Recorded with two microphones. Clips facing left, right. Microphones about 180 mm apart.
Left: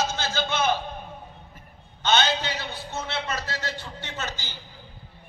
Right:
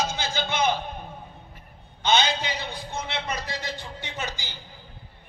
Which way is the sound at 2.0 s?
15° right (ahead or behind).